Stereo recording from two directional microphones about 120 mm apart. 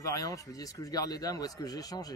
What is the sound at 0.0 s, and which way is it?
Speech, 30° left (ahead or behind).